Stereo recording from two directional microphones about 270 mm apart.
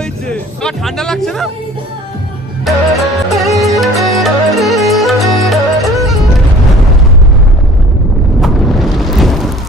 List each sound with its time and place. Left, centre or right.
0.3 s speech: centre
2.6 s music: centre
8.4 s a sound: centre